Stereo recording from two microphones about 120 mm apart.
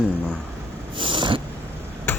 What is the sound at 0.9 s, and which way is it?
Snort, 45° right (ahead or behind).